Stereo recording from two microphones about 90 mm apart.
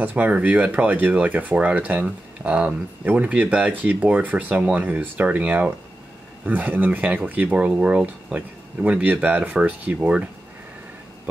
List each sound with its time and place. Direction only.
0.0 s speech: 15° right (ahead or behind)